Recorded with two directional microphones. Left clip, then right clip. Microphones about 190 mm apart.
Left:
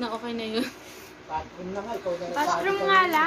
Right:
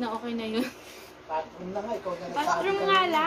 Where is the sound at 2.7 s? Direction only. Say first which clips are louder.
Left 4 dB; 25° left (ahead or behind).